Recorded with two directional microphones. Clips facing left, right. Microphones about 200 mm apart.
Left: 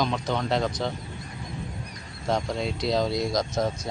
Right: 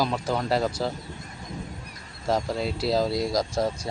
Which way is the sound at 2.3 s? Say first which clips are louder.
Right 1 dB; 5° right (ahead or behind).